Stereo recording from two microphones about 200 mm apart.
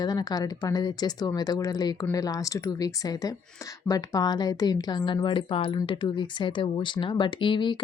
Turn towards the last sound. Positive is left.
turn(degrees=25)  # may be behind; listen again after turning